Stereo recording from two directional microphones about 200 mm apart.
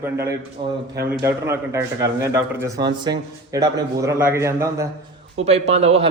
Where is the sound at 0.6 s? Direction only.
25° right (ahead or behind).